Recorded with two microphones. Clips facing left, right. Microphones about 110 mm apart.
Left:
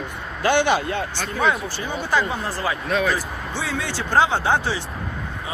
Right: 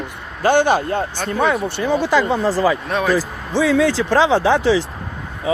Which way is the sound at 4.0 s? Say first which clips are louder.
Right 5 dB; 90° right.